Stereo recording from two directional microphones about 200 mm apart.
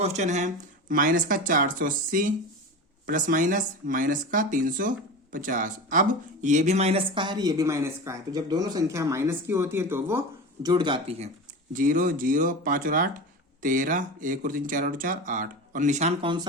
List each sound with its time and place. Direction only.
0.0 s speech: 35° right (ahead or behind)
11.7 s speech: 45° right (ahead or behind); by 16.5 s 25° right (ahead or behind)